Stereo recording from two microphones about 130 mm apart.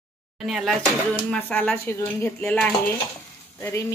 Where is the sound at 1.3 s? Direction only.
5° left (ahead or behind).